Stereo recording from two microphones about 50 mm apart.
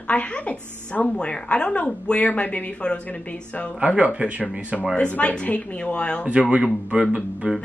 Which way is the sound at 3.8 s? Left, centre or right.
Right.